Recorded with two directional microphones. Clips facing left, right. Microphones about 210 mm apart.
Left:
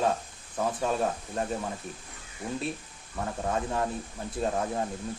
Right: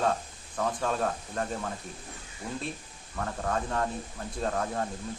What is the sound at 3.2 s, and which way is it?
Speech, 15° left (ahead or behind).